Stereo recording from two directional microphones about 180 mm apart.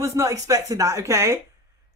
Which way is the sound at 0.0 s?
15° right (ahead or behind).